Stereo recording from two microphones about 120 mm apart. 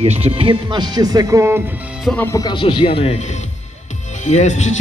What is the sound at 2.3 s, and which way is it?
Speech, 40° left (ahead or behind).